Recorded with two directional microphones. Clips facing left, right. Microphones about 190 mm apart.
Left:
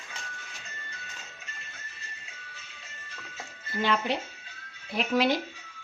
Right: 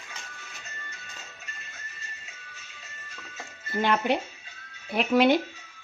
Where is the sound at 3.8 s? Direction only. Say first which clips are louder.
Right 3 dB; 55° right (ahead or behind).